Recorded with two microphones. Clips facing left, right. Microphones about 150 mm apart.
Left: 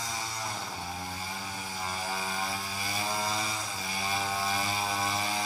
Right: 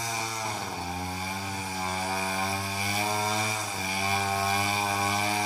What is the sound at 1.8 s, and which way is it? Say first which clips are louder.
Chainsaw: right 3 dB; 20° right (ahead or behind).